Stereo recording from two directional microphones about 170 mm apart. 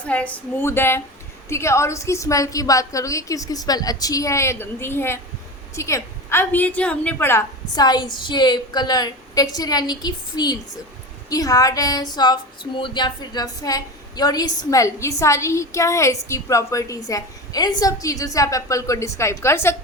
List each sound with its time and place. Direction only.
0.0 s a woman's voice: 10° left (ahead or behind)